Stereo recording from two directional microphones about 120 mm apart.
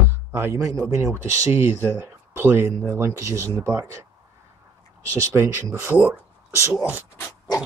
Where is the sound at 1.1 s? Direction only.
25° right (ahead or behind).